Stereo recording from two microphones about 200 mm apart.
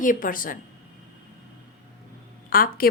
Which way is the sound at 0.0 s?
40° left (ahead or behind).